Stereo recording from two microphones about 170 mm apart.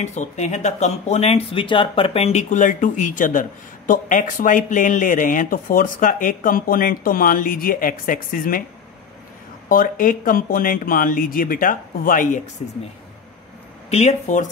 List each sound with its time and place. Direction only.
0.0 s speech: 45° left (ahead or behind)
9.7 s speech: 55° left (ahead or behind)
13.8 s speech: 40° left (ahead or behind)